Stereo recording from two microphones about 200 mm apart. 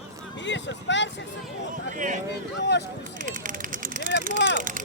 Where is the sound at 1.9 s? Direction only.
40° right (ahead or behind).